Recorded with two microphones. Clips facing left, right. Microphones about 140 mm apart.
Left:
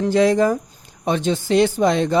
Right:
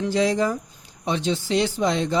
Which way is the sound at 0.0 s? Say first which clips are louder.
Left 5 dB; 55° left (ahead or behind).